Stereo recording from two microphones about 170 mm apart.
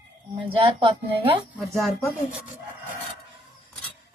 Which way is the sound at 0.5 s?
30° right (ahead or behind).